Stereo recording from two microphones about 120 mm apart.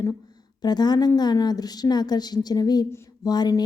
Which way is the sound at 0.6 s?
35° left (ahead or behind).